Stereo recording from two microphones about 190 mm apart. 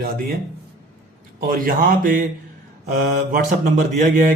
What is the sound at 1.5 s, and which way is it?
A man's voice, 50° right (ahead or behind).